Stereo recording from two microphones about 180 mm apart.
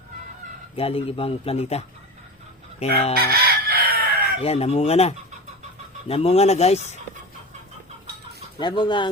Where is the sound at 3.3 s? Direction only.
55° right (ahead or behind).